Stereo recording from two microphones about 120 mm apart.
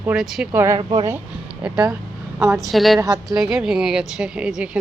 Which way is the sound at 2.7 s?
Centre (ahead or behind).